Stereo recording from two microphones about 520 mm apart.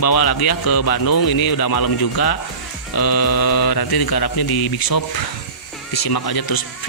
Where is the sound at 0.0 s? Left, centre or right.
Left.